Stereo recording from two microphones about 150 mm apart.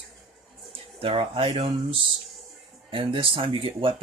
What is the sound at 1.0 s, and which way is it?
Speech, 35° right (ahead or behind).